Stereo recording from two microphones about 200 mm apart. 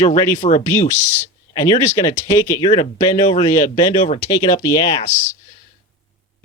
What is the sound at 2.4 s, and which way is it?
Speech, 15° left (ahead or behind).